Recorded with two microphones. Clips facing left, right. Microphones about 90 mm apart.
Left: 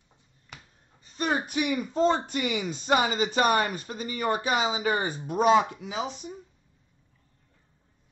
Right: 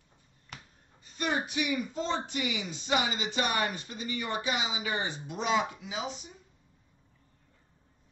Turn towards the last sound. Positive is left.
turn(degrees=50)  # may be behind; listen again after turning